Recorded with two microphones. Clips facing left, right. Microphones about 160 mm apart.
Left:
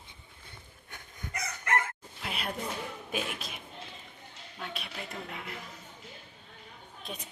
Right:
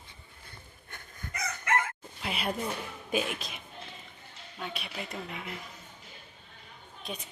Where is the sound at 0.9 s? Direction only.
15° left (ahead or behind).